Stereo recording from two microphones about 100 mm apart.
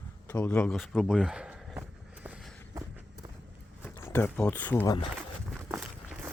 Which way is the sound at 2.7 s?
40° right (ahead or behind).